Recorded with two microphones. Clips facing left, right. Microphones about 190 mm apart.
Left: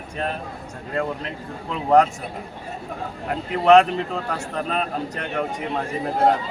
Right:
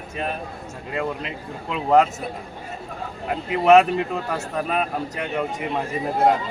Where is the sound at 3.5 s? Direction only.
5° right (ahead or behind).